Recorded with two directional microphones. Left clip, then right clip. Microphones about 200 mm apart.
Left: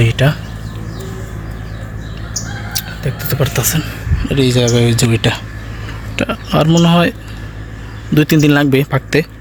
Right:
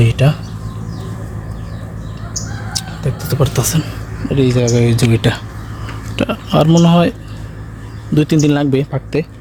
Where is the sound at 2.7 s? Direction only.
5° right (ahead or behind).